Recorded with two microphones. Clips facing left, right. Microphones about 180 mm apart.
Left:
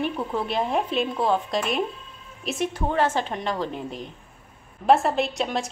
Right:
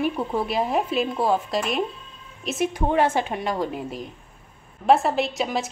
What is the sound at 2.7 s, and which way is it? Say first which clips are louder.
A woman's voice: right 3 dB; 15° right (ahead or behind).